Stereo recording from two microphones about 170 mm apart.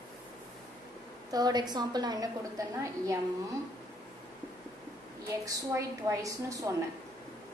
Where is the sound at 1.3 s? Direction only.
25° right (ahead or behind).